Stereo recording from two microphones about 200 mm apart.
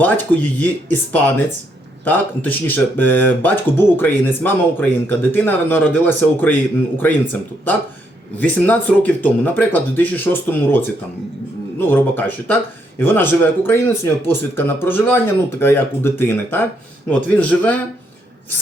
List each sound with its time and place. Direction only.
0.0 s speech: 10° left (ahead or behind)